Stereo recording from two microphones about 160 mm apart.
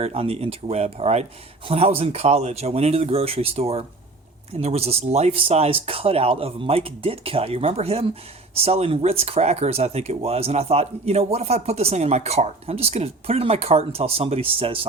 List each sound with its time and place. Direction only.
0.0 s speech: 35° right (ahead or behind)